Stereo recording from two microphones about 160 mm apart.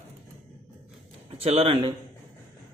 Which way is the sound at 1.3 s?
40° right (ahead or behind).